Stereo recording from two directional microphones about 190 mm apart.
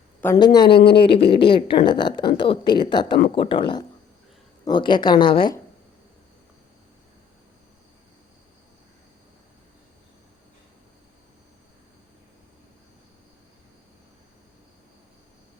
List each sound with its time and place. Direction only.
0.3 s a woman's voice: 25° left (ahead or behind)
0.7 s speech: 60° left (ahead or behind)
0.9 s a woman's voice: 30° left (ahead or behind)